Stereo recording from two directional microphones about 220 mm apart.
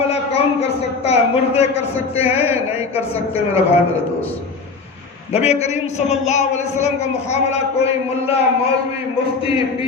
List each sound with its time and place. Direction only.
0.0 s a woman's voice: 30° left (ahead or behind)
5.3 s a woman's voice: 30° left (ahead or behind)